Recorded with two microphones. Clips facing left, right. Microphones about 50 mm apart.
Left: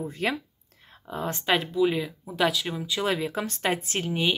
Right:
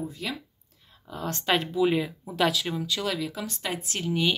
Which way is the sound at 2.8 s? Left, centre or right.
Left.